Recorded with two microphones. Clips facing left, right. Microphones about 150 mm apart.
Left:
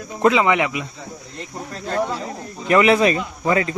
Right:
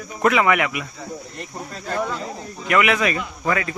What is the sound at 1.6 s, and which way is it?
Speech, centre (ahead or behind).